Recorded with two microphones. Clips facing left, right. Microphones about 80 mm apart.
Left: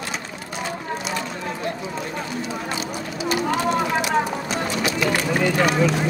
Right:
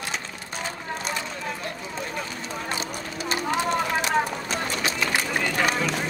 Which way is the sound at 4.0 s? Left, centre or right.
Right.